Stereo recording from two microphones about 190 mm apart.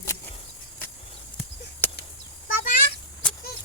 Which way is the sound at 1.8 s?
10° left (ahead or behind).